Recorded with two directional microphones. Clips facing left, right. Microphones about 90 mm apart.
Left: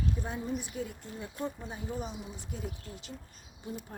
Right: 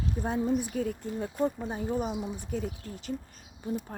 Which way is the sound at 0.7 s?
60° right (ahead or behind).